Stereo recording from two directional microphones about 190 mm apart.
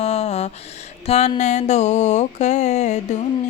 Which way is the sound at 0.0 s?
35° left (ahead or behind).